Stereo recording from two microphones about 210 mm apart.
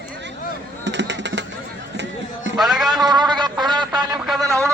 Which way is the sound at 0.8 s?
55° right (ahead or behind).